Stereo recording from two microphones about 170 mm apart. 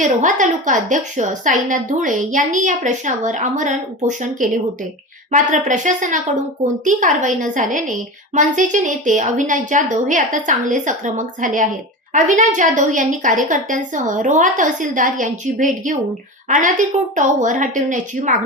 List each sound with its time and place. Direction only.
0.0 s a woman's voice: 45° right (ahead or behind)